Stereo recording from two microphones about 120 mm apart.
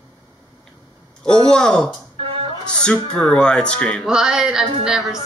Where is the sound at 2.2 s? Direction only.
50° right (ahead or behind).